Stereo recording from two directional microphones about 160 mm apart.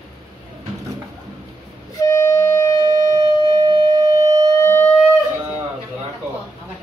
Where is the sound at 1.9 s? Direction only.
15° left (ahead or behind).